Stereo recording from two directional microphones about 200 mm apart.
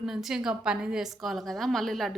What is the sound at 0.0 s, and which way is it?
A woman's voice, centre (ahead or behind).